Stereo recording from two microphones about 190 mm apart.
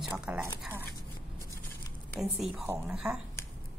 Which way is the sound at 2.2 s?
Centre (ahead or behind).